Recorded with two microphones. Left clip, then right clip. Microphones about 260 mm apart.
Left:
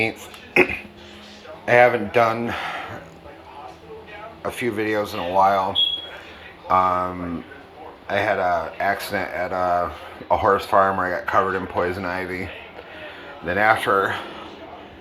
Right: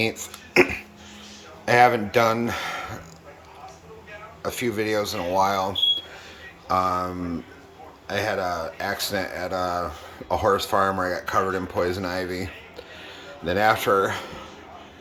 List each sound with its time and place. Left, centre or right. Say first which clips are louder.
0.2 s speech: left 1 dB; right
4.4 s speech: left 2 dB; centre
6.7 s speech: left 4 dB; centre
8.8 s speech: left 4 dB; right
10.3 s speech: left 4 dB; right
13.4 s speech: left 2 dB; right